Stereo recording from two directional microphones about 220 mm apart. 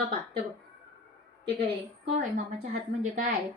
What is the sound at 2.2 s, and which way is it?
Speech, 35° right (ahead or behind).